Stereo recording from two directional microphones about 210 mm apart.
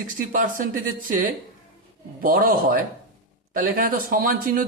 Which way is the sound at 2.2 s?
45° right (ahead or behind).